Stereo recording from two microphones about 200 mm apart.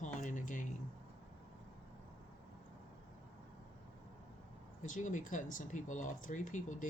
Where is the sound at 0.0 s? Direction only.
40° left (ahead or behind).